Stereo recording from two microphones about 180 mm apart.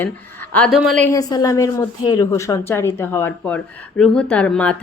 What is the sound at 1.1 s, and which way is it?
A woman's voice, 20° left (ahead or behind).